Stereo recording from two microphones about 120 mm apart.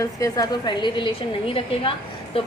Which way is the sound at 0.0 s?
30° left (ahead or behind).